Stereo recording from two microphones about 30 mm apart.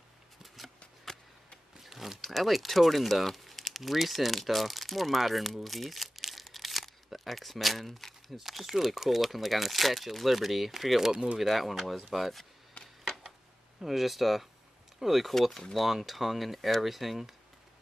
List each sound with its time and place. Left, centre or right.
1.8 s a sound: centre
2.2 s speech: centre
8.4 s speech: centre
13.7 s speech: centre
15.5 s speech: centre
15.8 s speech: centre